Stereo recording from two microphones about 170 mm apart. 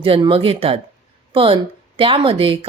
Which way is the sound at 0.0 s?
30° right (ahead or behind).